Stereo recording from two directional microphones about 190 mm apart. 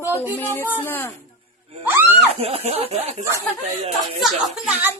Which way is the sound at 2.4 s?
30° right (ahead or behind).